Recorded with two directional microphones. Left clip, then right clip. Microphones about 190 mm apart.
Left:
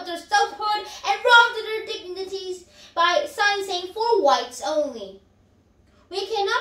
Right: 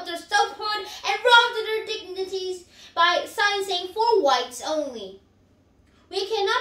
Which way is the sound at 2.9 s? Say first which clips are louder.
Even; 15° right (ahead or behind).